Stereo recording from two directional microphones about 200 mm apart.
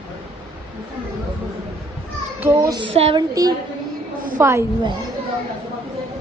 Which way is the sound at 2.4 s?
15° right (ahead or behind).